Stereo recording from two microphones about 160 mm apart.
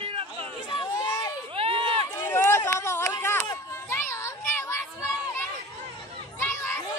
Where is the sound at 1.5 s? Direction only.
35° right (ahead or behind).